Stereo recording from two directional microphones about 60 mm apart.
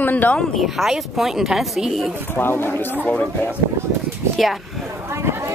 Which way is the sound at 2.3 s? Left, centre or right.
Left.